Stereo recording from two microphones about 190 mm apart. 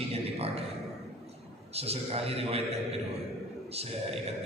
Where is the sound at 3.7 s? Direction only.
30° right (ahead or behind).